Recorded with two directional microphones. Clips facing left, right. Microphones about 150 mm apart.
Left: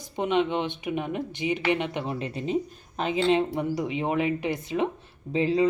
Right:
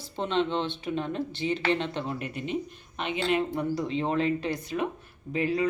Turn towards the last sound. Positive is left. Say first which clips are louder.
# left 4 dB
turn(degrees=25)  # may be behind; listen again after turning